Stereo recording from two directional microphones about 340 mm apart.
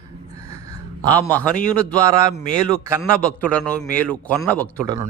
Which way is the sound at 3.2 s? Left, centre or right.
Centre.